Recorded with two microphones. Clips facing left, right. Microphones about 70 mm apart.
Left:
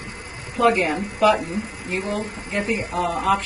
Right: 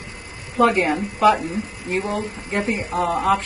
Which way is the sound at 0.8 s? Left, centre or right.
Right.